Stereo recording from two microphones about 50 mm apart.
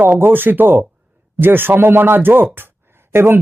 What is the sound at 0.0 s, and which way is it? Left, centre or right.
Speech, right.